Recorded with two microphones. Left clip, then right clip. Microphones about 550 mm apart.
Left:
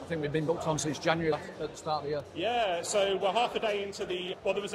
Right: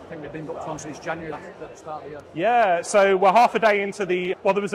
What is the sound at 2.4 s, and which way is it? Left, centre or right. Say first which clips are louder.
A man's voice: right 12 dB; right.